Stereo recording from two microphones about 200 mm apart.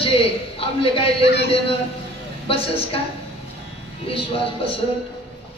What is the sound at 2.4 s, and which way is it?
Speech, 30° left (ahead or behind).